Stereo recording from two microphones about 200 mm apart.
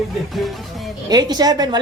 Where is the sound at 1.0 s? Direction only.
20° right (ahead or behind).